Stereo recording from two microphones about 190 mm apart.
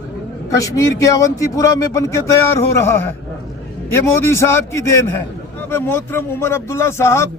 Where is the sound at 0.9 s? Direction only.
15° left (ahead or behind).